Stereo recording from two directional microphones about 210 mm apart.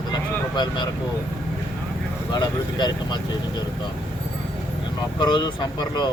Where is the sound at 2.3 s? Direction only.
20° left (ahead or behind).